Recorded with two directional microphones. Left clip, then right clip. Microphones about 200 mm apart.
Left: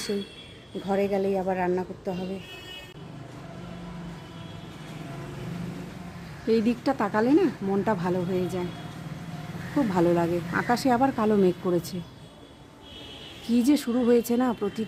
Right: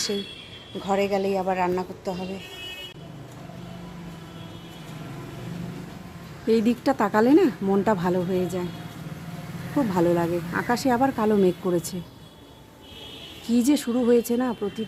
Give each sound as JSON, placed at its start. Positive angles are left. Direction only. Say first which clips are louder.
{"t": 0.9, "sound": "speech", "louder": "right 2 dB", "side_deg": 5}
{"t": 6.5, "sound": "speech", "louder": "right 3 dB", "side_deg": -15}
{"t": 9.7, "sound": "speech", "louder": "right 1 dB", "side_deg": -5}
{"t": 13.5, "sound": "speech", "louder": "right 1 dB", "side_deg": -5}